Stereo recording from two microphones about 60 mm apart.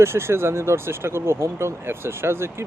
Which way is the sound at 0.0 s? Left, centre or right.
Right.